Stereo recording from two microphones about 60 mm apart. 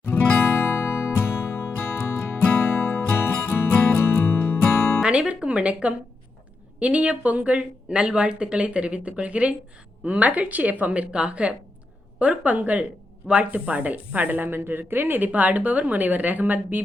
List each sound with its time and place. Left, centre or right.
0.1 s music: left
5.0 s a woman's voice: centre